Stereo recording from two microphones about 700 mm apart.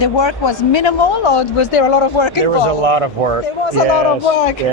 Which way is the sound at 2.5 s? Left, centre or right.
Right.